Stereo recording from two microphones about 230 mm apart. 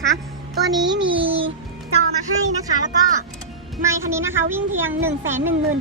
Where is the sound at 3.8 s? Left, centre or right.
Centre.